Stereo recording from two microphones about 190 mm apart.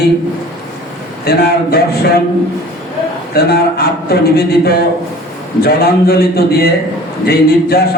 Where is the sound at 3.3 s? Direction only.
55° left (ahead or behind).